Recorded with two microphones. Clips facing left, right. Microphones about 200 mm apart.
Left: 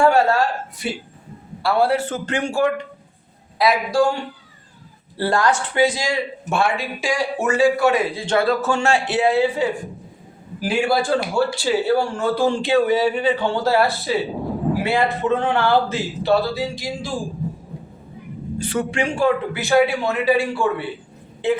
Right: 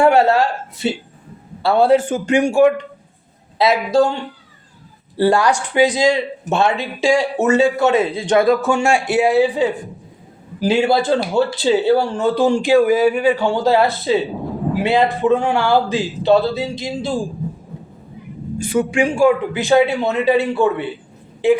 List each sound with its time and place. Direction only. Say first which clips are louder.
0.0 s speech: right 3 dB; 20° right (ahead or behind)
18.6 s speech: right 5 dB; 10° right (ahead or behind)